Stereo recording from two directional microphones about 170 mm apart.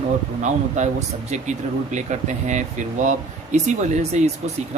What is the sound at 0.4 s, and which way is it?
A man's voice, 45° right (ahead or behind).